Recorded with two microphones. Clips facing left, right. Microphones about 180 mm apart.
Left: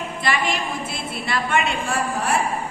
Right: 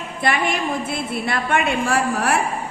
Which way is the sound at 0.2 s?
55° right (ahead or behind).